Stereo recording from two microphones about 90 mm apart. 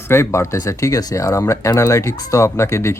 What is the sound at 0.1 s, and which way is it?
Speech, 30° left (ahead or behind).